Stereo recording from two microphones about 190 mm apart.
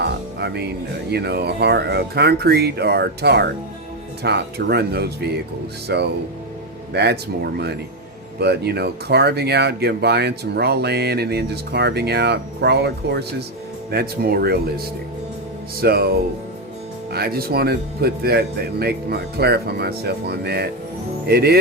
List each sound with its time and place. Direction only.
0.0 s speech: 60° right (ahead or behind)
8.4 s speech: 60° right (ahead or behind)
15.8 s speech: 55° right (ahead or behind)